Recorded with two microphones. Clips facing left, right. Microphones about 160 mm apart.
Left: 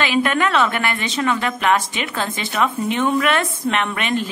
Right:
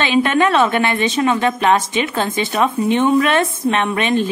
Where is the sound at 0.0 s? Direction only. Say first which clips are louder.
Right 4 dB; 25° right (ahead or behind).